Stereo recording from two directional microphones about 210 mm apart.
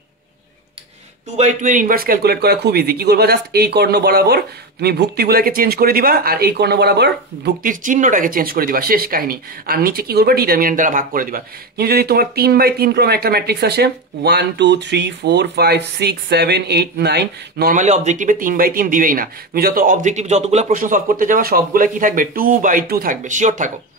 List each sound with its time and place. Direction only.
1.3 s a man's voice: 35° right (ahead or behind)